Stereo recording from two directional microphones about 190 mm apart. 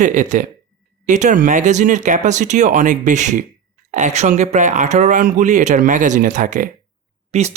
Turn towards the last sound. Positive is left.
turn(degrees=-35)  # may be behind; listen again after turning